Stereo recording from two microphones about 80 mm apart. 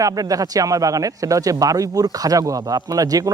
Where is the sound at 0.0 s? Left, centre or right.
Right.